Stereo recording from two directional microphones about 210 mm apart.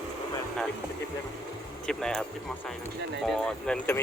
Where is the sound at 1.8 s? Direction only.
5° left (ahead or behind).